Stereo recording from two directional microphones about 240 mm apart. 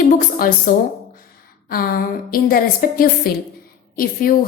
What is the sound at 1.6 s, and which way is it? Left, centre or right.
A woman's voice, left.